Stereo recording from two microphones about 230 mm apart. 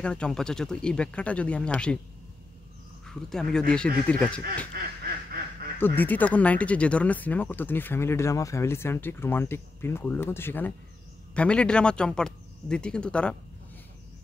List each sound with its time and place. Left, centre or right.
0.0 s speech: centre
3.1 s speech: centre
5.0 s quack: right
5.8 s speech: centre